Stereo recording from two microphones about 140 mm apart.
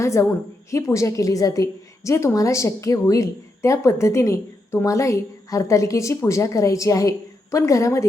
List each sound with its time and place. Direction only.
0.0 s a woman's voice: 20° left (ahead or behind)